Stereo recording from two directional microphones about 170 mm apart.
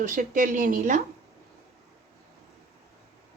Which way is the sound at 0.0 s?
50° right (ahead or behind).